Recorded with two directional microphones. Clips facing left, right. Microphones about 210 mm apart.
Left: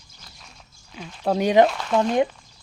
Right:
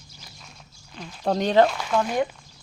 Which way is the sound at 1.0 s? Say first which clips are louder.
Left 2 dB; centre (ahead or behind).